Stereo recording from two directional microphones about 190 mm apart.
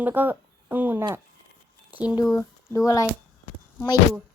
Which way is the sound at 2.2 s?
15° left (ahead or behind).